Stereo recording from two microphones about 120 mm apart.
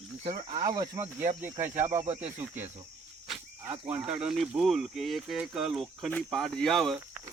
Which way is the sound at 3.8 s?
10° right (ahead or behind).